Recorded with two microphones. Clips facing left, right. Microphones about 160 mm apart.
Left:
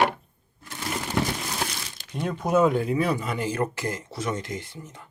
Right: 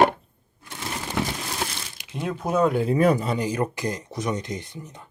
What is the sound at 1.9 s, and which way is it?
Speech, 10° right (ahead or behind).